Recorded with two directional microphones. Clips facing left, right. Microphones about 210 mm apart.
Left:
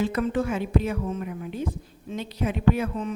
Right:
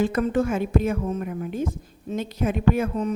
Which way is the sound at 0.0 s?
45° right (ahead or behind).